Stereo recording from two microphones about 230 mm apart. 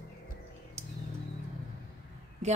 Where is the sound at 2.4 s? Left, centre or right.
Right.